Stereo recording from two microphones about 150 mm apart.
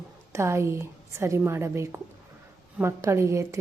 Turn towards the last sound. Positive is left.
turn(degrees=-20)  # may be behind; listen again after turning